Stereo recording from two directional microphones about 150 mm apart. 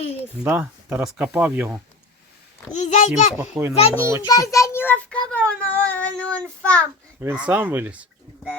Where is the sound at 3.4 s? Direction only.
15° right (ahead or behind).